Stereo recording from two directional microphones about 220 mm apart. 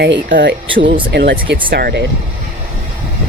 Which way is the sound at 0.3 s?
50° right (ahead or behind).